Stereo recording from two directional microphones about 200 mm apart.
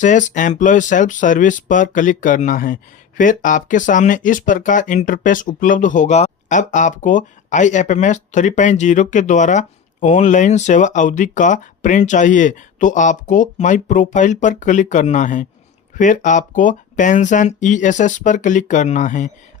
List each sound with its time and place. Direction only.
0.0 s speech: 40° left (ahead or behind)